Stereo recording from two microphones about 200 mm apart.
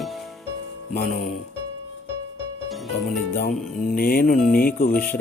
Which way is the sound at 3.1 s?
45° left (ahead or behind).